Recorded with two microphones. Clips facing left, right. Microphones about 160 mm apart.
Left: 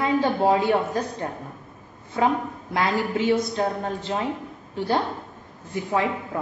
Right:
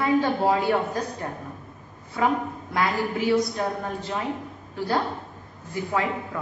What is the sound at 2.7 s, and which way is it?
A woman's voice, 25° left (ahead or behind).